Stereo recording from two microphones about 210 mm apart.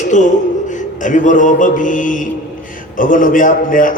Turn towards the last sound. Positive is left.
turn(degrees=40)  # may be behind; listen again after turning